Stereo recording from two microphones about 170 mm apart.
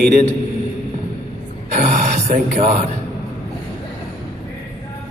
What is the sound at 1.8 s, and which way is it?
Speech, 45° right (ahead or behind).